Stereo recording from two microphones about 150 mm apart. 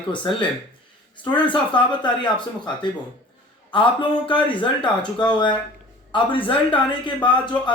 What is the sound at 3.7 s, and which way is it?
Speech, 35° left (ahead or behind).